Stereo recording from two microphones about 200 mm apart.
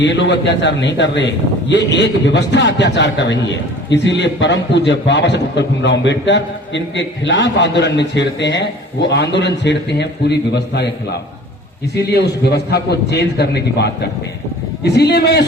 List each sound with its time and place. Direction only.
0.0 s a man's voice: 60° left (ahead or behind)
11.9 s a man's voice: 55° left (ahead or behind)